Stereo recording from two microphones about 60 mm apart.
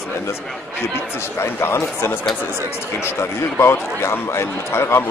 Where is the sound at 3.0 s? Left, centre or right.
Left.